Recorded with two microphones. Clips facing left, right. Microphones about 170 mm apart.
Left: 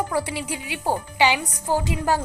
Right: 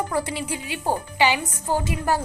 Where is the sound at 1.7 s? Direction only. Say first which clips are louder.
Left 1 dB; 15° right (ahead or behind).